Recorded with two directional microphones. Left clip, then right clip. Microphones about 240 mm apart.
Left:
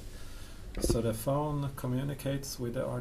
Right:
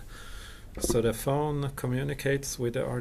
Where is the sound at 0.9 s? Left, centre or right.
Right.